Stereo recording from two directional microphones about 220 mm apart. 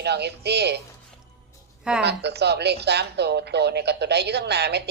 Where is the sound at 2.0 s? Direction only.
50° right (ahead or behind).